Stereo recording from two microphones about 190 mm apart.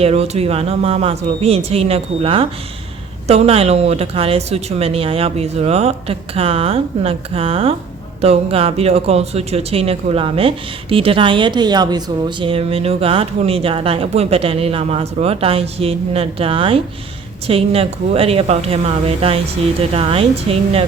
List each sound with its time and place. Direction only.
0.0 s a woman's voice: 30° right (ahead or behind)